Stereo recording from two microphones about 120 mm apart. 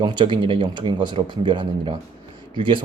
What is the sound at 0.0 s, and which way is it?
Speech, 40° right (ahead or behind).